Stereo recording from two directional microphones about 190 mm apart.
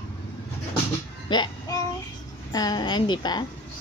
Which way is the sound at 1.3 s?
20° left (ahead or behind).